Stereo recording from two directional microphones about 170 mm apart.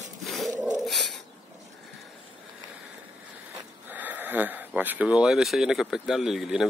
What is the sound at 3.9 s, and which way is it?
Speech, 10° right (ahead or behind).